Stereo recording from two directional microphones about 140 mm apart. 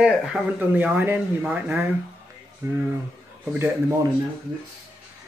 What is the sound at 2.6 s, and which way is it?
Speech, 20° right (ahead or behind).